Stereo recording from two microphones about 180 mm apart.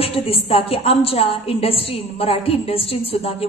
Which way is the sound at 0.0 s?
35° left (ahead or behind).